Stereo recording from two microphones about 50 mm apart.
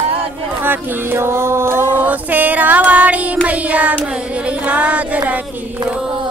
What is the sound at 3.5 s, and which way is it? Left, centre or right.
Child singing, right.